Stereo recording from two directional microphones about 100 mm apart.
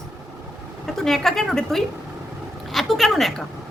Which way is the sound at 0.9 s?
5° left (ahead or behind).